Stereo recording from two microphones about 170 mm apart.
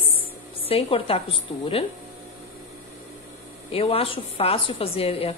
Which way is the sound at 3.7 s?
35° left (ahead or behind).